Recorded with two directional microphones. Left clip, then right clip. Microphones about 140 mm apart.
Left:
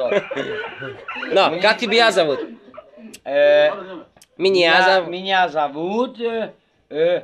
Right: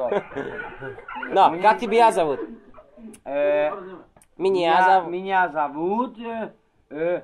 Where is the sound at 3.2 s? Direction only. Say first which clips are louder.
Left 7 dB; 15° left (ahead or behind).